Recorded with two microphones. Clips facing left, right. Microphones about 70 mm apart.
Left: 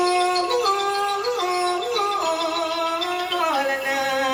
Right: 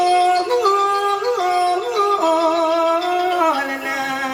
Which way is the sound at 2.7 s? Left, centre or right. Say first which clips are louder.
Right 7 dB; right.